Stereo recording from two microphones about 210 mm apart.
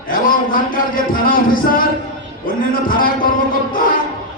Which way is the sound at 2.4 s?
40° left (ahead or behind).